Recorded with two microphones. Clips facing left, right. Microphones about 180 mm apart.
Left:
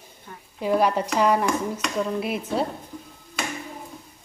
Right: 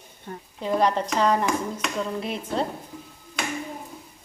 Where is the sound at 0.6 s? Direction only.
10° left (ahead or behind).